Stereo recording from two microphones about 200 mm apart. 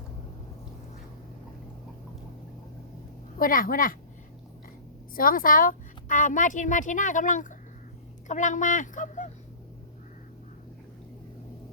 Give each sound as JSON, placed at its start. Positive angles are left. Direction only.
{"t": 3.3, "sound": "a woman's voice", "side_deg": 45}
{"t": 5.1, "sound": "a woman's voice", "side_deg": 45}